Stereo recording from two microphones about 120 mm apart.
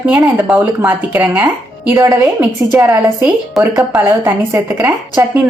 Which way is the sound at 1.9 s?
30° right (ahead or behind).